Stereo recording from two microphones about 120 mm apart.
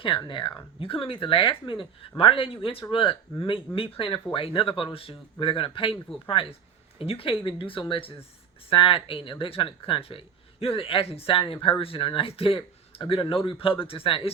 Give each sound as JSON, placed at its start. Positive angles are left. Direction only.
{"t": 0.3, "sound": "speech", "side_deg": 40}